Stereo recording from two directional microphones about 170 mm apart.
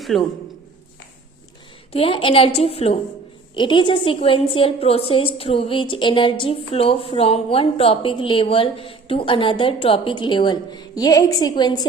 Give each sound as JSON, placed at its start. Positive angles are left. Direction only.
{"t": 0.0, "sound": "a man's voice", "side_deg": 0}
{"t": 1.9, "sound": "a woman's voice", "side_deg": 35}